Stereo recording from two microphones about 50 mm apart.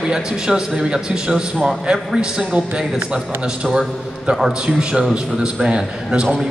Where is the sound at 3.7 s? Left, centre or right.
Centre.